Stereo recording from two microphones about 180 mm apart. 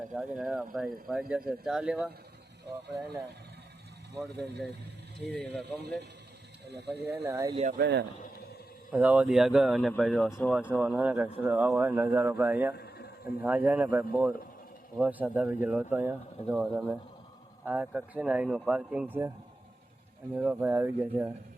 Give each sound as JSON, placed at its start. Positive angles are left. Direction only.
{"t": 0.1, "sound": "speech", "side_deg": 0}
{"t": 5.3, "sound": "speech", "side_deg": 5}
{"t": 6.7, "sound": "speech", "side_deg": -65}
{"t": 7.1, "sound": "speech", "side_deg": -15}
{"t": 7.5, "sound": "speech", "side_deg": -40}
{"t": 7.8, "sound": "speech", "side_deg": -70}
{"t": 8.9, "sound": "speech", "side_deg": -10}
{"t": 12.7, "sound": "a sound", "side_deg": 60}
{"t": 13.2, "sound": "speech", "side_deg": -10}
{"t": 20.3, "sound": "speech", "side_deg": -5}